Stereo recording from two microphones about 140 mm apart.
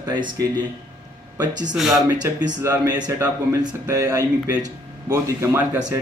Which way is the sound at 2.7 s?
20° right (ahead or behind).